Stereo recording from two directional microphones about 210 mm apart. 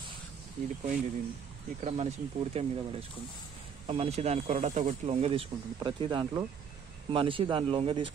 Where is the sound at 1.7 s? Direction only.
30° right (ahead or behind).